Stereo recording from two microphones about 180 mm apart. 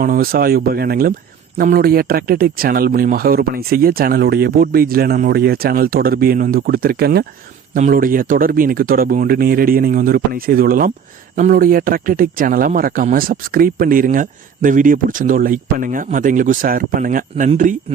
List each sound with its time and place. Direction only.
0.0 s speech: 55° right (ahead or behind)